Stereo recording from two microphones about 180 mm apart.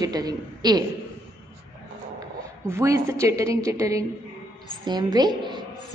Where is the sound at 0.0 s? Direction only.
20° right (ahead or behind).